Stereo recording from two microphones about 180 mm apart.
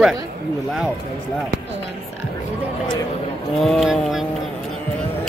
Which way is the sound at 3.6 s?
Centre (ahead or behind).